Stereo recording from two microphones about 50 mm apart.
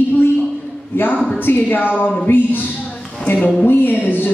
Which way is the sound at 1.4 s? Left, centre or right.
Left.